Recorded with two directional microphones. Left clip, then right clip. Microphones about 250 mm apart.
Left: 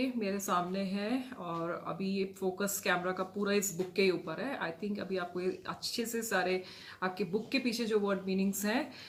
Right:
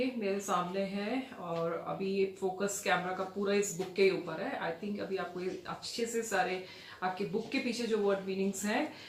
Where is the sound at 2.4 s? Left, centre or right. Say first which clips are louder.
Even; left.